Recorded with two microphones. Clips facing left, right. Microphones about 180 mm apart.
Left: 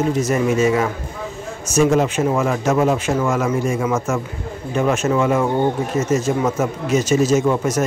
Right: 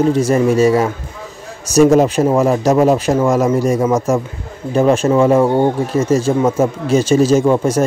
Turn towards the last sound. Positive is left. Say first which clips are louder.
# right 4 dB
turn(degrees=-30)  # may be behind; listen again after turning